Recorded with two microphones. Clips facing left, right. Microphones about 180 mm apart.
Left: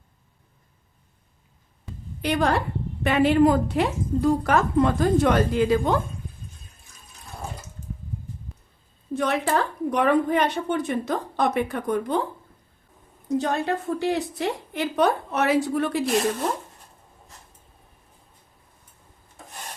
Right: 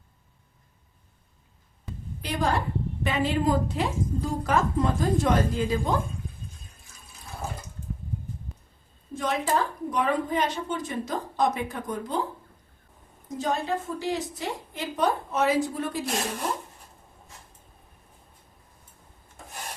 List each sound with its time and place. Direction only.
2.2 s a woman's voice: 70° left (ahead or behind)
9.1 s a woman's voice: 70° left (ahead or behind)
13.2 s a woman's voice: 70° left (ahead or behind)